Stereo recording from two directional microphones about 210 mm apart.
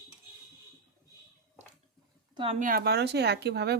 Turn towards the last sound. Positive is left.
turn(degrees=-50)  # may be behind; listen again after turning